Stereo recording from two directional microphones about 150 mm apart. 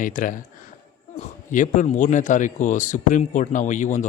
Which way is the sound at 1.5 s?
60° left (ahead or behind).